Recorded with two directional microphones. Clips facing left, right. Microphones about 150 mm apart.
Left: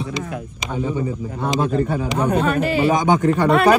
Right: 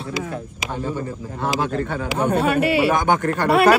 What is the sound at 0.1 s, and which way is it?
Speech, 5° right (ahead or behind).